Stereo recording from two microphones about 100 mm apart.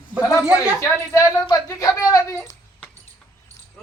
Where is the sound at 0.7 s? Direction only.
30° left (ahead or behind).